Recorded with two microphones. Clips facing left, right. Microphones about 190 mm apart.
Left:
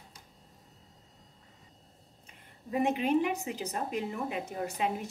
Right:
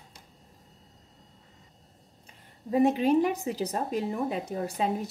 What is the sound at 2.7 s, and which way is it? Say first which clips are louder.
A woman's voice: right 5 dB; 35° right (ahead or behind).